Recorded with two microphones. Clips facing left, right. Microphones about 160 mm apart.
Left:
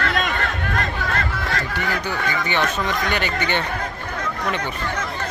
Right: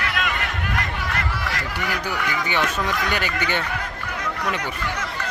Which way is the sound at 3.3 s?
60° left (ahead or behind).